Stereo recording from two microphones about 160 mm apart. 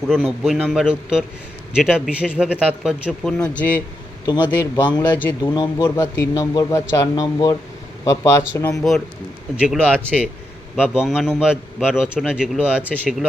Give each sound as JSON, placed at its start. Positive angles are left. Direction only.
{"t": 0.4, "sound": "speech", "side_deg": 0}
{"t": 4.3, "sound": "speech", "side_deg": 25}
{"t": 9.6, "sound": "speech", "side_deg": -10}